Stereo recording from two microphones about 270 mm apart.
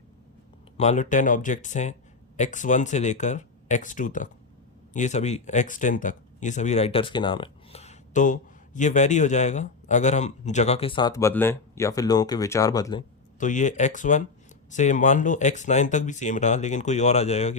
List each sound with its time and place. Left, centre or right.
0.8 s speech: left
13.4 s speech: left